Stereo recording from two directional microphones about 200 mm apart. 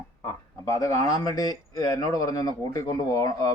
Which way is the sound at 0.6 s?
15° left (ahead or behind).